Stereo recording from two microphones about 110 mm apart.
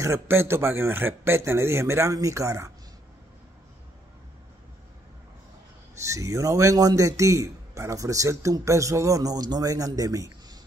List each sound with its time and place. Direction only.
0.0 s a man's voice: 25° right (ahead or behind)
6.0 s a man's voice: 30° right (ahead or behind)